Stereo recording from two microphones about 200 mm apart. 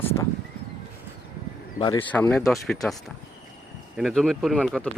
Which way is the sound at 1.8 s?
25° left (ahead or behind).